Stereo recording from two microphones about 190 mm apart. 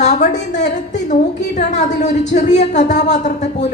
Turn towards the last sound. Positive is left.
turn(degrees=40)  # may be behind; listen again after turning